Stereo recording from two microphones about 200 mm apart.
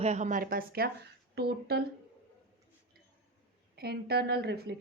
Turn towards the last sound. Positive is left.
turn(degrees=-55)  # may be behind; listen again after turning